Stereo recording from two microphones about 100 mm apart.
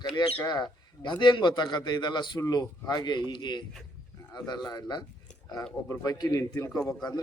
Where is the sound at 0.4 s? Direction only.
45° left (ahead or behind).